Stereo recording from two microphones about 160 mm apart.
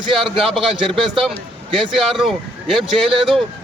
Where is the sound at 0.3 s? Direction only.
Centre (ahead or behind).